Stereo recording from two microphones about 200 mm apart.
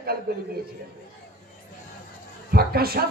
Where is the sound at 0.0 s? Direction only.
50° right (ahead or behind).